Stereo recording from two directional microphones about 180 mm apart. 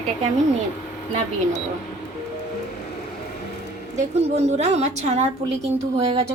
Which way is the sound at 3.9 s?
35° right (ahead or behind).